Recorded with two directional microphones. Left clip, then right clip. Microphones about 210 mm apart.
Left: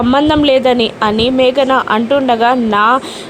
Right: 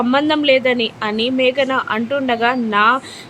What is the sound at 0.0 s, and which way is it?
Speech, 20° left (ahead or behind).